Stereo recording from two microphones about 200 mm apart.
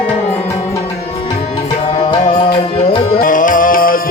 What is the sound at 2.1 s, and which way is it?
Music, 25° left (ahead or behind).